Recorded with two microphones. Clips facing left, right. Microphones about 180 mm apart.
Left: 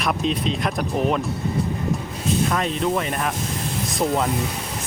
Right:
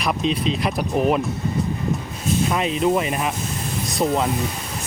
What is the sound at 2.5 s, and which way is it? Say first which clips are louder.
Speech: right 3 dB; 5° right (ahead or behind).